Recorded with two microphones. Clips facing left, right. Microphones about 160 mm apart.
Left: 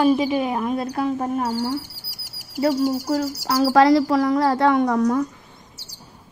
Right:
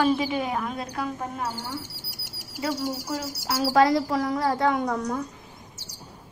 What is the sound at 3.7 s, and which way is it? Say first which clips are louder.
A woman's voice: left 5 dB; 75° left (ahead or behind).